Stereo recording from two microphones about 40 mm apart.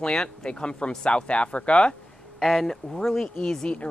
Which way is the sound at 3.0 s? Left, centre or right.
Centre.